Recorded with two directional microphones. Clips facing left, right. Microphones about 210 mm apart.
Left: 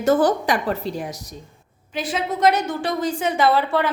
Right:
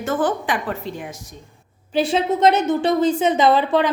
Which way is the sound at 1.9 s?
25° right (ahead or behind).